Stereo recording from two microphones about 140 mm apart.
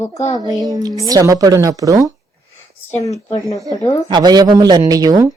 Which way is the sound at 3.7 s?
25° left (ahead or behind).